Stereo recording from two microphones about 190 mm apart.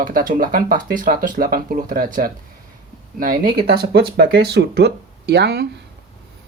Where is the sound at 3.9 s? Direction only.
60° right (ahead or behind).